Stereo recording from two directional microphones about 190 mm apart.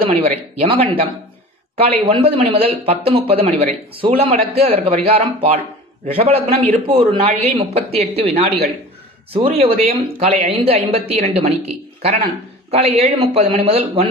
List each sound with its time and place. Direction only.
0.0 s a man's voice: 35° right (ahead or behind)
2.1 s a man's voice: 30° right (ahead or behind)